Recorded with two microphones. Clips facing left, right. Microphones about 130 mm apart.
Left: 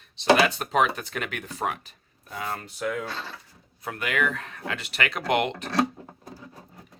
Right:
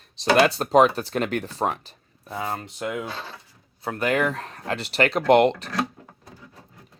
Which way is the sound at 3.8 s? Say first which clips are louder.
Right 5 dB; 35° right (ahead or behind).